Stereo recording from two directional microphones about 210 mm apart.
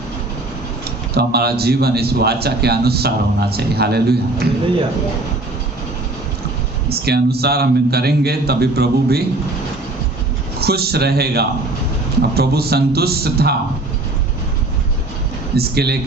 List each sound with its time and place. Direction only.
1.1 s a man's voice: 50° right (ahead or behind)
6.8 s a man's voice: 50° right (ahead or behind)
10.6 s a man's voice: 50° right (ahead or behind)
15.5 s a man's voice: 50° right (ahead or behind)